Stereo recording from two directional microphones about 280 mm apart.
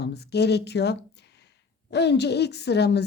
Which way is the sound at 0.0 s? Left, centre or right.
Left.